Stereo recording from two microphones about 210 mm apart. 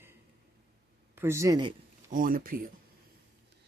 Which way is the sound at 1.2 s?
10° right (ahead or behind).